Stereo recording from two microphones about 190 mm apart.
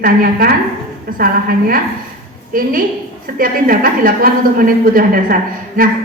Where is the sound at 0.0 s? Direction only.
50° right (ahead or behind).